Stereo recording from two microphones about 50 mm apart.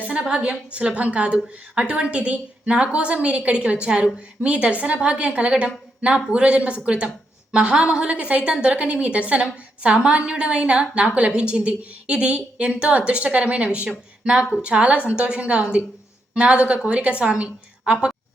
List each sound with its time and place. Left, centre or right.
0.0 s a woman's voice: right